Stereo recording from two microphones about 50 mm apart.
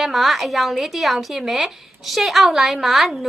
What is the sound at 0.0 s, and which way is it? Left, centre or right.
A woman's voice, centre.